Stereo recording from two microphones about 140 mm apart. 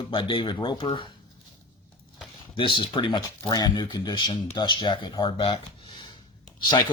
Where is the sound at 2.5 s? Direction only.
40° left (ahead or behind).